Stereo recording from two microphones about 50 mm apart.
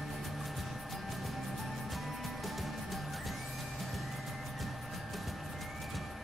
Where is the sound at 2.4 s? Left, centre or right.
Centre.